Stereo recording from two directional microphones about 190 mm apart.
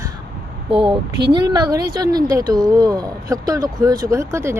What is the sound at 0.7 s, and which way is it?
Speech, 25° right (ahead or behind).